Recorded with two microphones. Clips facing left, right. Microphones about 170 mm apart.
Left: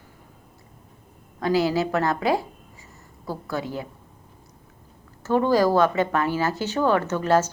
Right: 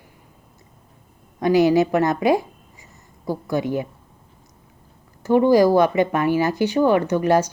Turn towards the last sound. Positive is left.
turn(degrees=-15)  # may be behind; listen again after turning